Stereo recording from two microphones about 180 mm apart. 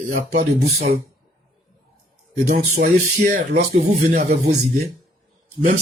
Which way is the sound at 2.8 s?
55° right (ahead or behind).